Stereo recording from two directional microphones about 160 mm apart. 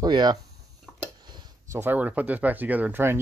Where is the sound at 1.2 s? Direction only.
25° right (ahead or behind).